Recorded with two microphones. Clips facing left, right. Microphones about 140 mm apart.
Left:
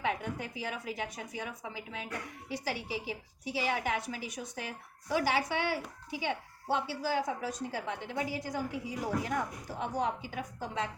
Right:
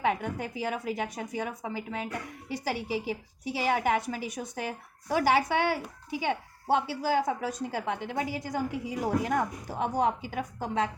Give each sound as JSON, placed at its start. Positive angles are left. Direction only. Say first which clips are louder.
{"t": 0.0, "sound": "a woman's voice", "louder": "right 5 dB", "side_deg": -50}